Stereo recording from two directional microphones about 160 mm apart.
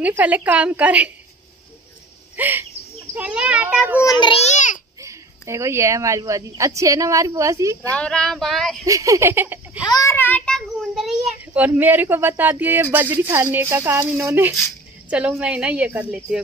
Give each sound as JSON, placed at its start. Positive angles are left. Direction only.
{"t": 0.0, "sound": "a child's voice", "side_deg": -10}
{"t": 2.3, "sound": "bird", "side_deg": -10}
{"t": 3.2, "sound": "a child's voice", "side_deg": -5}
{"t": 4.0, "sound": "a child's voice", "side_deg": 30}
{"t": 4.4, "sound": "a sound", "side_deg": 50}
{"t": 5.0, "sound": "speech", "side_deg": -20}
{"t": 7.9, "sound": "speech", "side_deg": 5}
{"t": 8.8, "sound": "a child's voice", "side_deg": -20}
{"t": 9.8, "sound": "a child's voice", "side_deg": 20}